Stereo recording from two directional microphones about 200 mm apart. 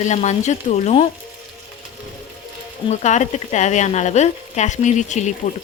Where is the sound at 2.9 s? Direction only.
35° left (ahead or behind).